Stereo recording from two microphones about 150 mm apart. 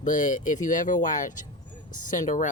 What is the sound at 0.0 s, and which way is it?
Speech, 55° left (ahead or behind).